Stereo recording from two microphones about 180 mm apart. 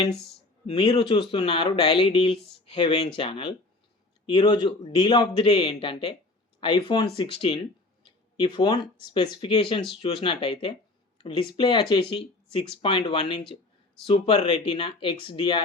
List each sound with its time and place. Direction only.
0.7 s speech: 25° left (ahead or behind)